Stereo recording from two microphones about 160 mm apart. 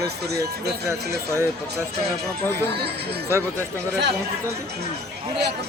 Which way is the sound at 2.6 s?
90° right.